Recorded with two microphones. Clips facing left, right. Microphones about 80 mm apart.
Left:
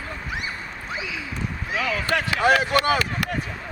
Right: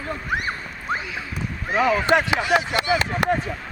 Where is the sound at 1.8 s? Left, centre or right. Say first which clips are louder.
Right 6 dB; right.